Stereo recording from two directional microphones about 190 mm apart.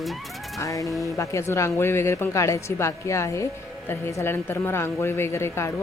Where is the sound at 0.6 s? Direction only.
15° left (ahead or behind).